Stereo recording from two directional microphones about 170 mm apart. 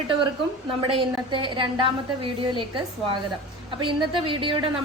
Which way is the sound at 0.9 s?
30° right (ahead or behind).